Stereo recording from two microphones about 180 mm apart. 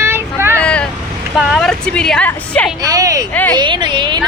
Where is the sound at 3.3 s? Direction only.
10° left (ahead or behind).